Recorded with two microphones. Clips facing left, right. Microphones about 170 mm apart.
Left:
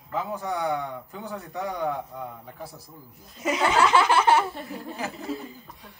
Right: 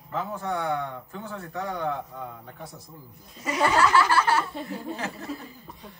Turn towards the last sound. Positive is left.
turn(degrees=0)  # may be behind; listen again after turning